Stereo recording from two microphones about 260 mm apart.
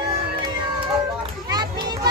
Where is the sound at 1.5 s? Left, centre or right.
Centre.